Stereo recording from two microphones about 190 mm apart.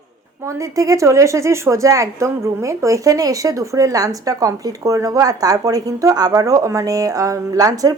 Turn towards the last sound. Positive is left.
turn(degrees=-20)  # may be behind; listen again after turning